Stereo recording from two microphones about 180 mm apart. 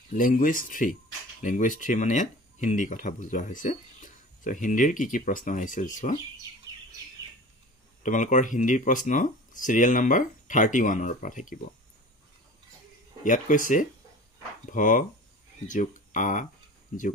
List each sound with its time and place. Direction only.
0.1 s speech: 50° left (ahead or behind)
8.0 s speech: 45° left (ahead or behind)
13.2 s speech: 45° left (ahead or behind)